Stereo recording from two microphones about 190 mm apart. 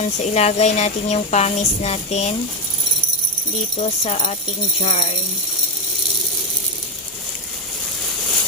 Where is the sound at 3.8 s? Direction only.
35° left (ahead or behind).